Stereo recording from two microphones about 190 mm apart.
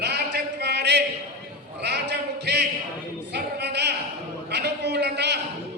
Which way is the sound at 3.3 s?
60° right (ahead or behind).